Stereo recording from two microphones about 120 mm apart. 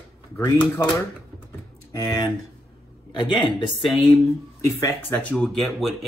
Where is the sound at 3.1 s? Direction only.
40° left (ahead or behind).